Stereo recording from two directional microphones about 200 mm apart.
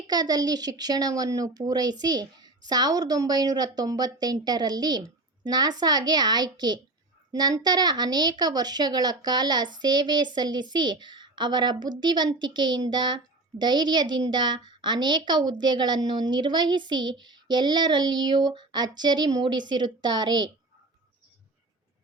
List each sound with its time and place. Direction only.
0.1 s a woman's voice: 20° right (ahead or behind)